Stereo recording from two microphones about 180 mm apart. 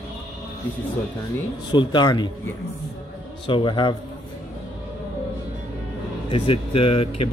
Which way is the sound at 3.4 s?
25° left (ahead or behind).